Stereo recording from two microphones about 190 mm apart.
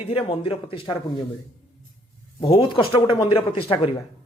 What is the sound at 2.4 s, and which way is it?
Speech, 25° left (ahead or behind).